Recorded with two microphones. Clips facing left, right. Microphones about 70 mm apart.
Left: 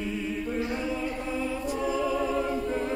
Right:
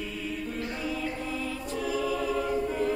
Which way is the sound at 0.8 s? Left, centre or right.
Left.